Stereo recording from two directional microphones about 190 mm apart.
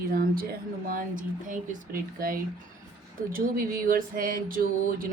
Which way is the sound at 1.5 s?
45° right (ahead or behind).